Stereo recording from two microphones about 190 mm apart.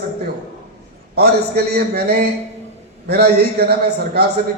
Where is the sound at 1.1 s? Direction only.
55° right (ahead or behind).